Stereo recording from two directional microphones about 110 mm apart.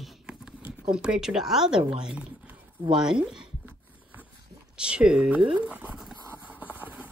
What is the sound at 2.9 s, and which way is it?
Speech, 5° right (ahead or behind).